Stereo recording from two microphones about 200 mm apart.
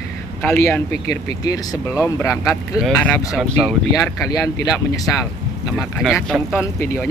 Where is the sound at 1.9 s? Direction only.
15° left (ahead or behind).